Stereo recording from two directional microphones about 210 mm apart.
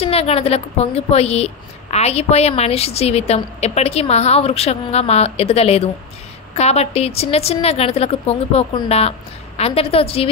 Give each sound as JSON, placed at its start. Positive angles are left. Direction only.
{"t": 0.0, "sound": "a woman's voice", "side_deg": 30}